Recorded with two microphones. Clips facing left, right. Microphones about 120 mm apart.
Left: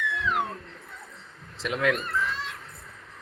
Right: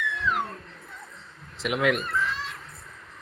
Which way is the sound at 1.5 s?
15° right (ahead or behind).